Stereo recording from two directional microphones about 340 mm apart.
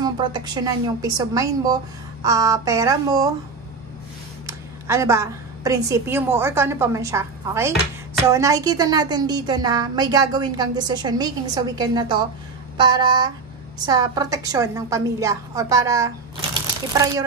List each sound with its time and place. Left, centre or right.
0.0 s a woman's voice: centre
4.5 s a woman's voice: centre